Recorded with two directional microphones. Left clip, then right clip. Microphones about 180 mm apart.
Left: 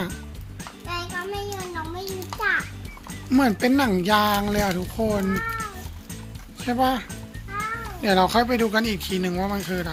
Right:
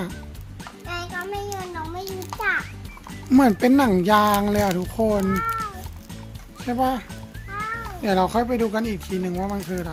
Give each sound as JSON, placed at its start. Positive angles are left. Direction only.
{"t": 0.6, "sound": "music", "side_deg": 0}
{"t": 3.2, "sound": "speech", "side_deg": -30}
{"t": 5.2, "sound": "speech", "side_deg": -5}